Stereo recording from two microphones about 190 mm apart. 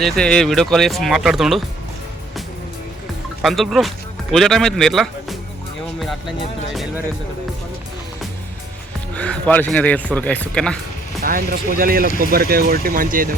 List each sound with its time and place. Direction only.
0.0 s speech: 5° left (ahead or behind)
3.4 s speech: centre (ahead or behind)
6.7 s speech: centre (ahead or behind)
9.1 s speech: 5° left (ahead or behind)
11.2 s speech: 50° right (ahead or behind)